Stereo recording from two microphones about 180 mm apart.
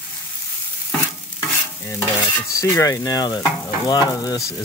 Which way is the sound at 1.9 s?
15° left (ahead or behind).